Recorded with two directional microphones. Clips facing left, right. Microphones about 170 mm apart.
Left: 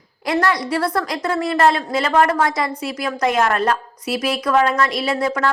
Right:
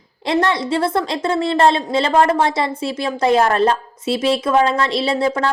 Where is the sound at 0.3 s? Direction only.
25° right (ahead or behind).